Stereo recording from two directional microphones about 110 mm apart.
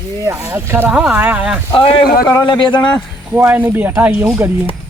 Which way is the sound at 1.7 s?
55° left (ahead or behind).